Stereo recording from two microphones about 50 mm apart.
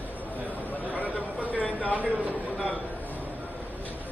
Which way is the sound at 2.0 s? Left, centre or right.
Right.